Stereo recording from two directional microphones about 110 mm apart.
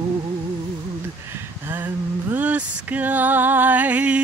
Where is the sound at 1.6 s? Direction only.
20° right (ahead or behind).